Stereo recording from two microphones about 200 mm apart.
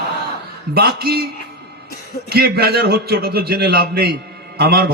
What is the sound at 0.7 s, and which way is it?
Speech, 50° right (ahead or behind).